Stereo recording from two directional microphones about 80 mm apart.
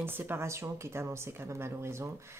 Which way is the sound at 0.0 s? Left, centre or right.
Right.